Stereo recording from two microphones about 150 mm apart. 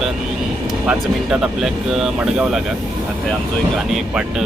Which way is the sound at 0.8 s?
5° right (ahead or behind).